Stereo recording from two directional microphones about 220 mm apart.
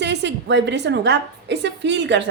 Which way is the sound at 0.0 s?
50° right (ahead or behind).